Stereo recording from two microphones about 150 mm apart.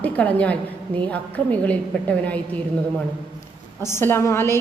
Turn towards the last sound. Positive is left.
turn(degrees=15)  # may be behind; listen again after turning